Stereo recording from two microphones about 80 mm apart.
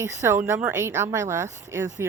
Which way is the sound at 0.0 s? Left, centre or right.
Right.